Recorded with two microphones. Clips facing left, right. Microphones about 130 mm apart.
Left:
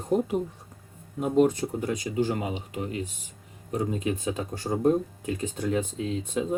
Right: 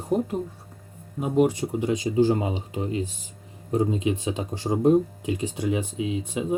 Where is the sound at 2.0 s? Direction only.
30° right (ahead or behind).